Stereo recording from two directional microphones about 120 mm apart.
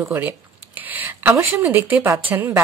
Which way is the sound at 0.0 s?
20° right (ahead or behind).